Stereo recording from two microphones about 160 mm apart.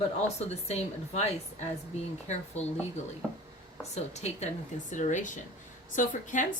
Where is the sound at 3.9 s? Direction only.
45° left (ahead or behind).